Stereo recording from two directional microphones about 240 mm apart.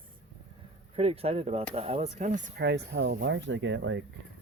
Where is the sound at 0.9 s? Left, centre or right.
Right.